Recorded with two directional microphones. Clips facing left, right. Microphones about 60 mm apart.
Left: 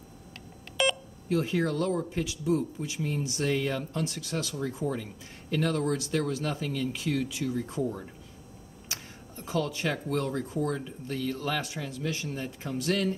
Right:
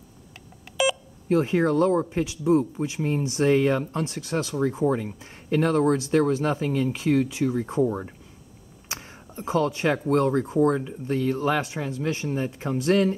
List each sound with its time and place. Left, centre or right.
0.8 s telephone dialing: centre
1.3 s speech: right
9.3 s speech: right